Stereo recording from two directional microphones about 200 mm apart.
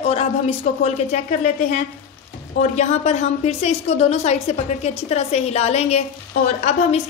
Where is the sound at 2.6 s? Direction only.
35° left (ahead or behind).